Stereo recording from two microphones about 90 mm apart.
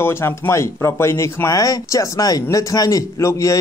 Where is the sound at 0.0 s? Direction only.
30° left (ahead or behind).